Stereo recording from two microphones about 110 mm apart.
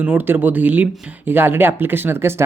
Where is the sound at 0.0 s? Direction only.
15° right (ahead or behind).